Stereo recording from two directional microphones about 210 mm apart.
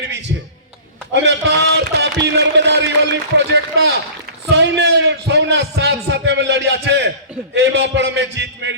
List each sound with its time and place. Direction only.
1.1 s music: 55° right (ahead or behind)
2.2 s a sound: 55° right (ahead or behind)
7.5 s a man's voice: 55° right (ahead or behind)